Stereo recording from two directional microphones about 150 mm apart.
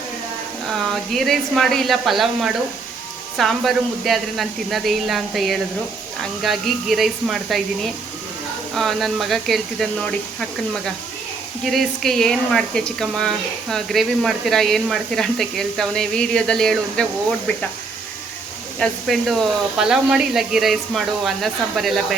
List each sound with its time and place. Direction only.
0.7 s speech: centre (ahead or behind)
8.7 s speech: centre (ahead or behind)
11.6 s speech: centre (ahead or behind)
18.8 s speech: centre (ahead or behind)